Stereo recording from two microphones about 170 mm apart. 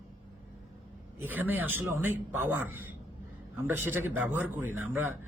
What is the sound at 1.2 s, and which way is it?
A man's voice, 10° right (ahead or behind).